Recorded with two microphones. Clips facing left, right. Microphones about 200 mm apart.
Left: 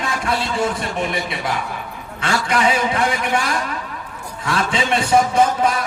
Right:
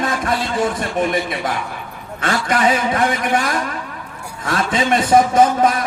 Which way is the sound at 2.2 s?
45° right (ahead or behind).